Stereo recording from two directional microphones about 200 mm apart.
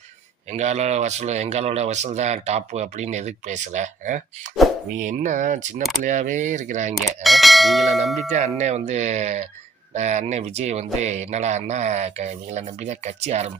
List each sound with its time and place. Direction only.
0.5 s speech: 35° right (ahead or behind)
7.3 s bell: centre (ahead or behind)
8.5 s speech: 35° right (ahead or behind)